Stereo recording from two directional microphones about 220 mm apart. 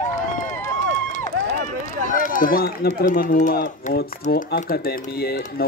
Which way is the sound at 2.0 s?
40° left (ahead or behind).